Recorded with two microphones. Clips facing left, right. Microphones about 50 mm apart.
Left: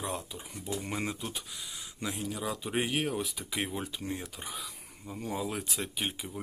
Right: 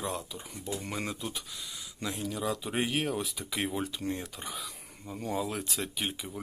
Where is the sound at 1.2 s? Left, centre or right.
Centre.